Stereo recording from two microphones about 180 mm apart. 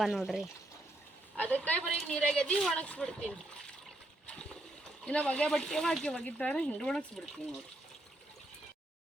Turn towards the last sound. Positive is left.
turn(degrees=0)  # may be behind; listen again after turning